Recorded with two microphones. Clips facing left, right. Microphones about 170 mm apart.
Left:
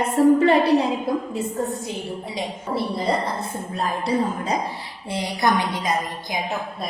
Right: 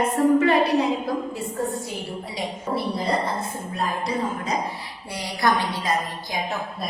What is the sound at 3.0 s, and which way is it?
Speech, centre (ahead or behind).